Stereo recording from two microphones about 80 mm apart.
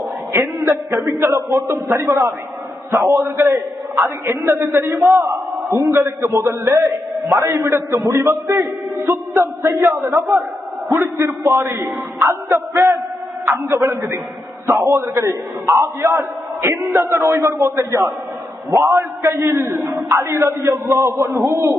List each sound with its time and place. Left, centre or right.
0.3 s a man's voice: right
0.9 s a man's voice: right
16.6 s a man's voice: right
16.8 s a man's voice: right